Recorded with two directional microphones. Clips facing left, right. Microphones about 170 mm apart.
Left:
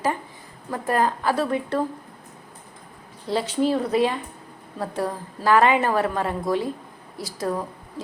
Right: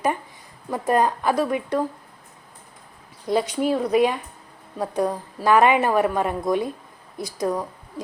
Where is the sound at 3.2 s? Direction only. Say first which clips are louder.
Right 1 dB; 15° right (ahead or behind).